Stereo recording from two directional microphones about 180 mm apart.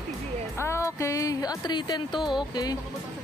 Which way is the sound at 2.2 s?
Centre (ahead or behind).